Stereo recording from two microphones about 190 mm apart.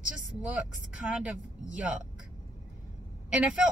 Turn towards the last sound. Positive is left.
turn(degrees=-5)  # may be behind; listen again after turning